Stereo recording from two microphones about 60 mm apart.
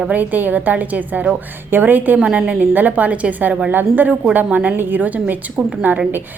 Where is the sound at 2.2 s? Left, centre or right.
Centre.